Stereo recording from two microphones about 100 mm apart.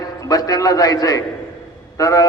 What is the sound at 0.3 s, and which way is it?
A man's voice, 40° left (ahead or behind).